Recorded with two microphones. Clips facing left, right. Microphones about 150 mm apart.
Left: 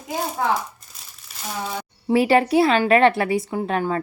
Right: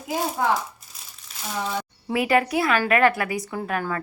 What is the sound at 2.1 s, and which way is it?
A woman's voice, 30° left (ahead or behind).